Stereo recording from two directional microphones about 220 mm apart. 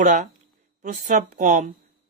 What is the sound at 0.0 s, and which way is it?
Speech, 35° right (ahead or behind).